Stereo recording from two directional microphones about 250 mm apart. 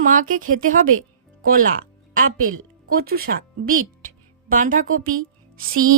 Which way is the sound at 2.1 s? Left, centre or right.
Right.